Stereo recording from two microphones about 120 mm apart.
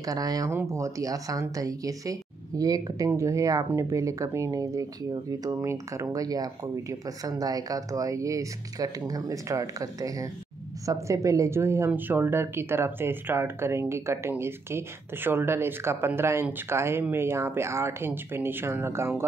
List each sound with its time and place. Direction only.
0.0 s speech: 30° right (ahead or behind)